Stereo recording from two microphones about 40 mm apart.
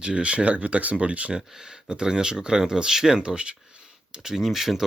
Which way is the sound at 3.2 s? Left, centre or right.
Right.